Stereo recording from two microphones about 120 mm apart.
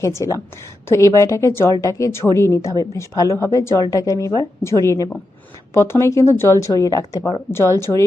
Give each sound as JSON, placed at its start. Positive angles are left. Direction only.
{"t": 0.0, "sound": "a woman's voice", "side_deg": 25}